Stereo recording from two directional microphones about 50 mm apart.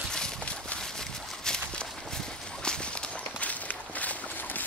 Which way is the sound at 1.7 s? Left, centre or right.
Centre.